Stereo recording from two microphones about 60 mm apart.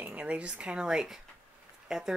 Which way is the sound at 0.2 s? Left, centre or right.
Centre.